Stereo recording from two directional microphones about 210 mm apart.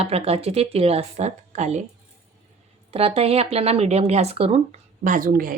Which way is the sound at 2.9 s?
30° right (ahead or behind).